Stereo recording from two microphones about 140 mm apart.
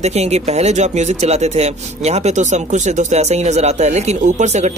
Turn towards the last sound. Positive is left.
turn(degrees=-55)  # may be behind; listen again after turning